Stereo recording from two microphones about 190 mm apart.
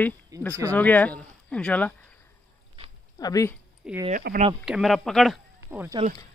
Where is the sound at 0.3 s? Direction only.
20° right (ahead or behind).